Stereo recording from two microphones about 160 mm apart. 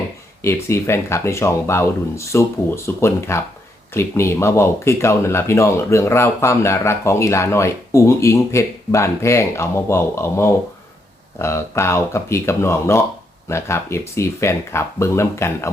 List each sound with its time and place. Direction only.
0.4 s speech: 15° left (ahead or behind)